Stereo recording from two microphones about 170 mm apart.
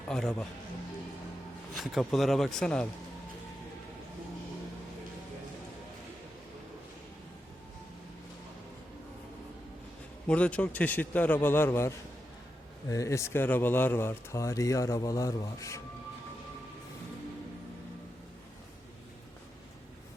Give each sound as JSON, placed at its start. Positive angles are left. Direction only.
{"t": 0.1, "sound": "speech", "side_deg": 5}
{"t": 1.7, "sound": "speech", "side_deg": 0}
{"t": 10.2, "sound": "speech", "side_deg": 5}